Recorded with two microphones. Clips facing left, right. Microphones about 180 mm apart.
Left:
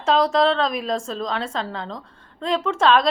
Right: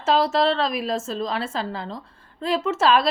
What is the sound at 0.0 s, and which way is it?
A woman's voice, 5° right (ahead or behind).